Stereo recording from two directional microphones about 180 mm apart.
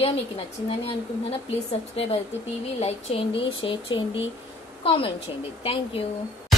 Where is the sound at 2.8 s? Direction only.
30° left (ahead or behind).